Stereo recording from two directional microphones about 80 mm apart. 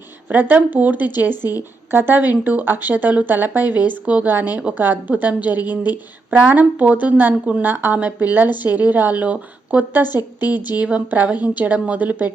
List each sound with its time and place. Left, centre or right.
0.3 s a woman's voice: right
10.1 s a woman's voice: left
10.8 s a woman's voice: centre